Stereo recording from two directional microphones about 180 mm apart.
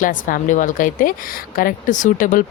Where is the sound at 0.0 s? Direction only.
50° left (ahead or behind).